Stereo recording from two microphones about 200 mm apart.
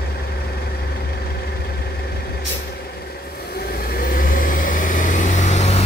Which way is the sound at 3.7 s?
50° left (ahead or behind).